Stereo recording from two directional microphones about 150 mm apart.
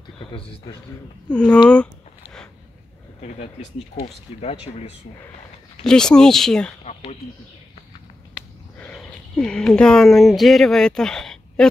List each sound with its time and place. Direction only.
0.7 s speech: 25° left (ahead or behind)
1.3 s speech: 5° left (ahead or behind)
4.0 s speech: 45° left (ahead or behind)
5.9 s speech: 5° left (ahead or behind)
8.7 s speech: 5° left (ahead or behind)